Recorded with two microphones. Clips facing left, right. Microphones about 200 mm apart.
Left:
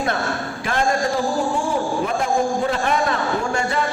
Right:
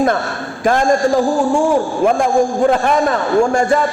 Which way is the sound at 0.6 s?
45° right (ahead or behind).